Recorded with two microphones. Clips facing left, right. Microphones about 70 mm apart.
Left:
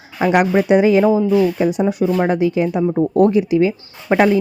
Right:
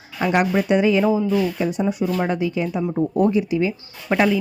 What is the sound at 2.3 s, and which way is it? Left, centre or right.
Speech, left.